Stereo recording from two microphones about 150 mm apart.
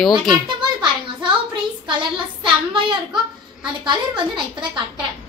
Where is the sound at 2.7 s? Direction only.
30° right (ahead or behind).